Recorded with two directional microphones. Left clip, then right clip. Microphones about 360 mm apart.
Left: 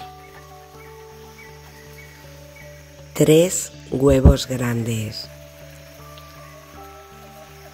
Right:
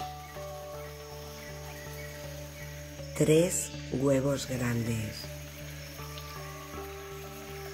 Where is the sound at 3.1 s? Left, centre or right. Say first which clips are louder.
Left 10 dB; left.